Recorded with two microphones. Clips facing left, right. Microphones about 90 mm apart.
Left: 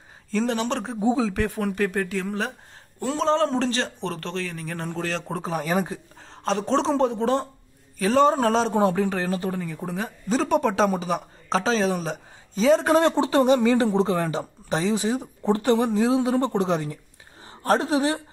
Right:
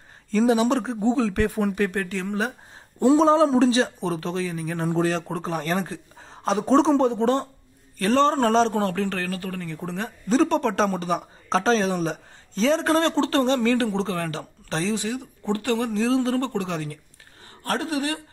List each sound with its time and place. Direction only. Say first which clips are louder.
0.3 s speech: right 5 dB; 5° right (ahead or behind)
1.0 s speech: left 1 dB; 10° left (ahead or behind)
1.3 s speech: right 2 dB; centre (ahead or behind)
3.0 s a man's voice: right 6 dB; 15° right (ahead or behind); by 5.9 s 10° left (ahead or behind)
6.1 s speech: right 1 dB; 5° right (ahead or behind)
8.7 s speech: left 3 dB; 15° left (ahead or behind)
9.7 s a woman's voice: left 1 dB; 5° left (ahead or behind); by 18.2 s 20° left (ahead or behind)